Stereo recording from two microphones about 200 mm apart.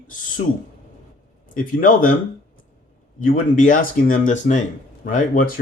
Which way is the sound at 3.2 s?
40° left (ahead or behind).